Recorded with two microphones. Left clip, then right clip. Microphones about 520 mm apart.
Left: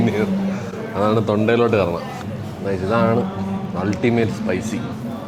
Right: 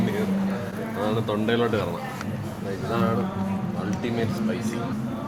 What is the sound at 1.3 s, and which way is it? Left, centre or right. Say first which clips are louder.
Speech: left 7 dB; left.